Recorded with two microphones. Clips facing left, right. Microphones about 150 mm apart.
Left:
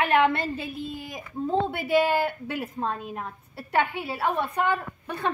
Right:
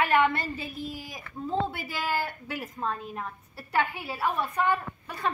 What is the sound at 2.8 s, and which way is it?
A woman's voice, 25° left (ahead or behind).